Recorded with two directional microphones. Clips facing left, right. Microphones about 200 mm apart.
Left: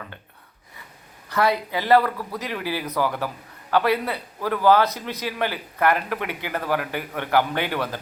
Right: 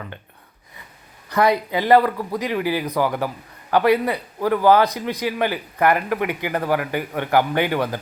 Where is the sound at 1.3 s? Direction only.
15° right (ahead or behind).